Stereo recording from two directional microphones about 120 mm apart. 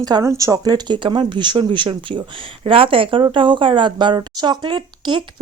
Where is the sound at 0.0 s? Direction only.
30° right (ahead or behind).